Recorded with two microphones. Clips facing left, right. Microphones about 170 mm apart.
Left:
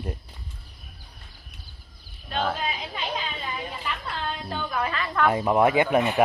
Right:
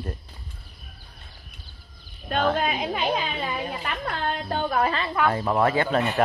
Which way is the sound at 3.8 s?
55° right (ahead or behind).